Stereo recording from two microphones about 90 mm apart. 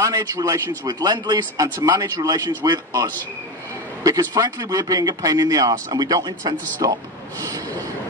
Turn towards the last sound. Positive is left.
turn(degrees=-45)  # may be behind; listen again after turning